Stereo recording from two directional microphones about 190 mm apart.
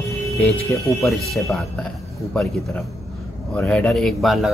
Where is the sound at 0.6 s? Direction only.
15° left (ahead or behind).